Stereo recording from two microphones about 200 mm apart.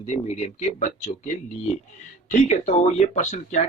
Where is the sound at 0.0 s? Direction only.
35° left (ahead or behind).